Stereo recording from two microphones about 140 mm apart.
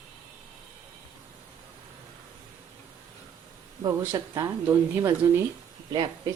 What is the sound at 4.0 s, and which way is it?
Speech, 25° right (ahead or behind).